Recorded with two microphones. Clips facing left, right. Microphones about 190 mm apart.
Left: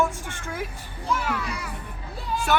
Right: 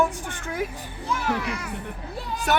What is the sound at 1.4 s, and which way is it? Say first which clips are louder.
Speech: right 3 dB; 65° right (ahead or behind).